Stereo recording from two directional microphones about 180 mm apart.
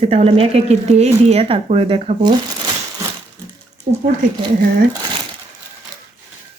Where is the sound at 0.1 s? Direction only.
35° right (ahead or behind).